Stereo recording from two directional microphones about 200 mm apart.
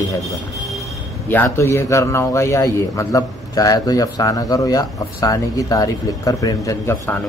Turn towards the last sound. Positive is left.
turn(degrees=15)  # may be behind; listen again after turning